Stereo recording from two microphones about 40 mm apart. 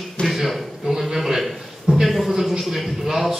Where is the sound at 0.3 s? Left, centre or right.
Centre.